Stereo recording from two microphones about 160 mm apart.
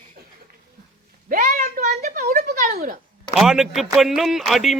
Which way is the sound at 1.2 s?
55° right (ahead or behind).